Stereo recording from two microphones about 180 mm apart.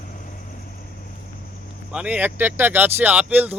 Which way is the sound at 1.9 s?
10° right (ahead or behind).